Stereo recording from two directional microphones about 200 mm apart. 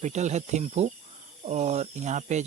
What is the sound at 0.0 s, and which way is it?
Speech, 35° right (ahead or behind).